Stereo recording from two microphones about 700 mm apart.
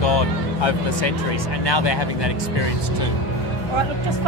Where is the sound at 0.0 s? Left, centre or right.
Left.